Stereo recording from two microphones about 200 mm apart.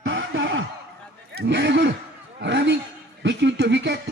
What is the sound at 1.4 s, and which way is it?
Speech, 60° right (ahead or behind).